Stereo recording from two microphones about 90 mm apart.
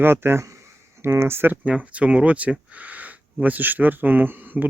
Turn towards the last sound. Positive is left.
turn(degrees=-20)  # may be behind; listen again after turning